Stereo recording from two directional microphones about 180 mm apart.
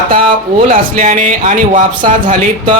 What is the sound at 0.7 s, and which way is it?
A man's voice, 45° right (ahead or behind).